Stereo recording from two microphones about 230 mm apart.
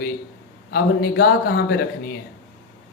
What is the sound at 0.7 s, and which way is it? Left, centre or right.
Speech, left.